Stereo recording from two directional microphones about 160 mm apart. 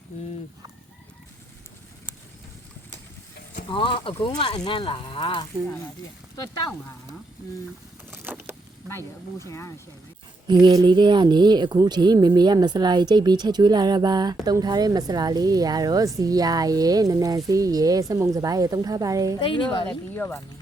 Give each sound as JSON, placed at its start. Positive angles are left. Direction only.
{"t": 3.7, "sound": "speech", "side_deg": 30}
{"t": 8.1, "sound": "vehicle", "side_deg": -15}
{"t": 8.9, "sound": "speech", "side_deg": 15}
{"t": 10.4, "sound": "a woman's voice", "side_deg": -30}
{"t": 19.4, "sound": "speech", "side_deg": 30}
{"t": 20.1, "sound": "speech", "side_deg": 15}